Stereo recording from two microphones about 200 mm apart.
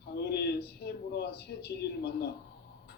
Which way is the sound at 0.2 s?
55° left (ahead or behind).